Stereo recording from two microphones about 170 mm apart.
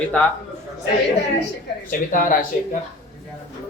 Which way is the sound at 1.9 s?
55° left (ahead or behind).